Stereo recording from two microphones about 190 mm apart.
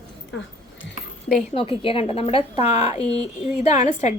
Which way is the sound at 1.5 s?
30° left (ahead or behind).